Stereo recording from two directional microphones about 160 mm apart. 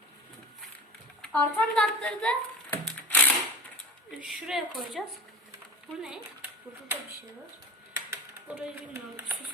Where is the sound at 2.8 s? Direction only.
10° left (ahead or behind).